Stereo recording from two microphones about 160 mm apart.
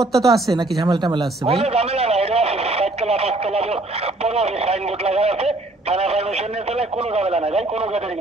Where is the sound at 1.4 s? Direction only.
40° right (ahead or behind).